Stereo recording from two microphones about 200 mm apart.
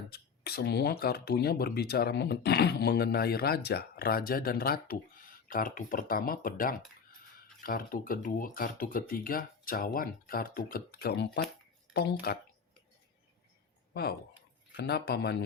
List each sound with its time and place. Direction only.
0.1 s speech: 50° left (ahead or behind)
13.9 s speech: 50° left (ahead or behind)